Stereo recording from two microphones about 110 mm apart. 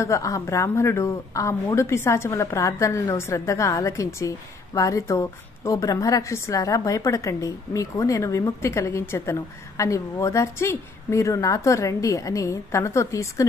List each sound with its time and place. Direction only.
0.0 s a woman's voice: 30° left (ahead or behind)